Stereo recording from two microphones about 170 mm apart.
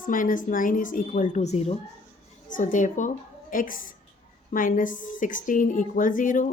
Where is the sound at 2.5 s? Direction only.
50° left (ahead or behind).